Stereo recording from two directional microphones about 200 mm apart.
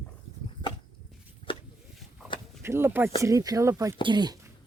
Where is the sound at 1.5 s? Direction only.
25° left (ahead or behind).